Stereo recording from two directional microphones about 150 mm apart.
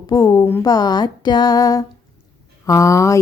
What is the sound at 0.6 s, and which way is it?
Speech, 25° left (ahead or behind).